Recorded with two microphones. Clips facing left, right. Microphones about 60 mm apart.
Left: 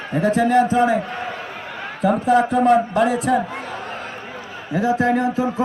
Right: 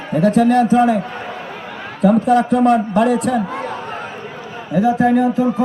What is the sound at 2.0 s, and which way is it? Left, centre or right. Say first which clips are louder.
A man's voice: right 3 dB; centre.